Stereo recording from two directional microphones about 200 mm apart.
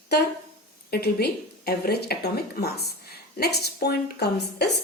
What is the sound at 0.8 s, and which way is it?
A woman's voice, 50° left (ahead or behind).